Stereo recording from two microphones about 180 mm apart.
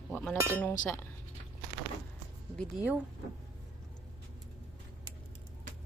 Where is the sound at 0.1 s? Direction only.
10° left (ahead or behind).